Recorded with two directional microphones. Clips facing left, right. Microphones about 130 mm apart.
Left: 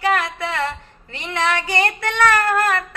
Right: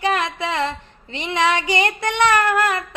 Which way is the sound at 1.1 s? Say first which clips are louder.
Right 2 dB; 20° right (ahead or behind).